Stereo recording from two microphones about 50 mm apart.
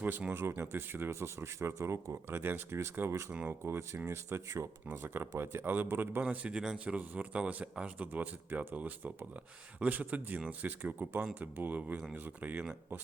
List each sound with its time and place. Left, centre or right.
0.0 s speech: right
0.6 s speech: right
2.4 s speech: right
3.1 s speech: right
3.6 s speech: right
4.1 s speech: right
5.0 s speech: right
5.4 s speech: right
5.6 s speech: right
6.3 s speech: right